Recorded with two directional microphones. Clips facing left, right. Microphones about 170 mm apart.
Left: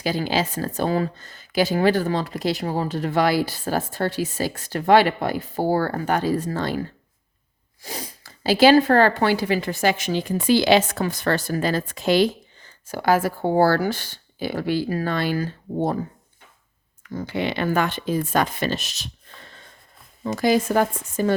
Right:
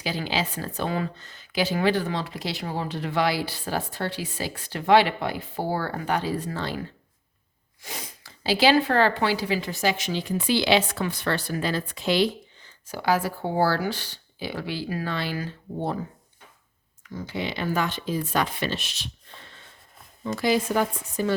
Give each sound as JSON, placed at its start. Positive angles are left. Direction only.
{"t": 0.0, "sound": "speech", "side_deg": 45}
{"t": 7.8, "sound": "speech", "side_deg": 35}
{"t": 17.0, "sound": "speech", "side_deg": 55}